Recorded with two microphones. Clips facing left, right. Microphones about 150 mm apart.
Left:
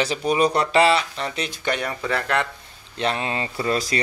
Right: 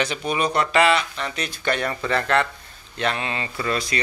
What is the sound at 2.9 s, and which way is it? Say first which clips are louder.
Speech: left 1 dB; 30° left (ahead or behind).